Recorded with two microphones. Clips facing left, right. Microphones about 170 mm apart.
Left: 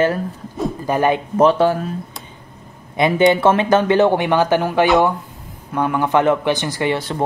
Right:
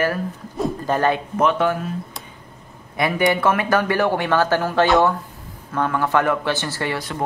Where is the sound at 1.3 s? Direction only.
30° left (ahead or behind).